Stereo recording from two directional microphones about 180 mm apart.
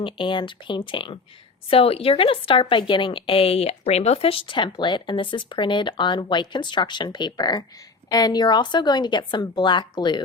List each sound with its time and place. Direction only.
0.0 s a woman's voice: 25° left (ahead or behind)